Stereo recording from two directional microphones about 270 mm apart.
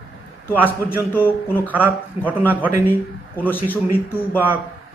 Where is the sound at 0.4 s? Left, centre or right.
Centre.